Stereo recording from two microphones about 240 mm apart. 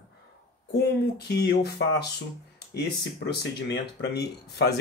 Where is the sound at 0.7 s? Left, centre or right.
Left.